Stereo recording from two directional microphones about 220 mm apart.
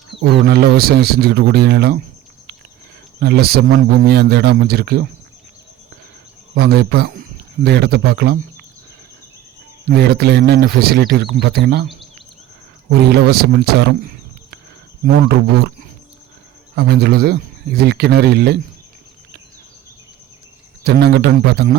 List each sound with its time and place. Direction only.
0.1 s speech: 50° right (ahead or behind)
3.2 s speech: 45° right (ahead or behind)
6.5 s speech: 45° right (ahead or behind)
9.9 s speech: 45° right (ahead or behind)
12.9 s speech: 45° right (ahead or behind)
16.7 s speech: 45° right (ahead or behind)
20.8 s speech: 45° right (ahead or behind)